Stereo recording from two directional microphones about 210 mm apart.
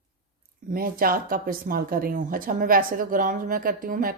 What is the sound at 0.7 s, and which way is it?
Speech, 45° right (ahead or behind).